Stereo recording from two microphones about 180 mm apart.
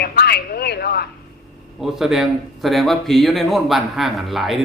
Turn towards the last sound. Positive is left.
turn(degrees=0)  # may be behind; listen again after turning